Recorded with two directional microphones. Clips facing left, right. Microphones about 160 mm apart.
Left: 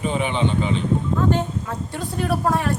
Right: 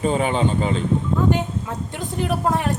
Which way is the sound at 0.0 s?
40° right (ahead or behind).